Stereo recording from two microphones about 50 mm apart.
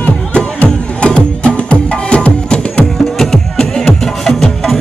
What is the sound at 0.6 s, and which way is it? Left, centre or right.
Music, left.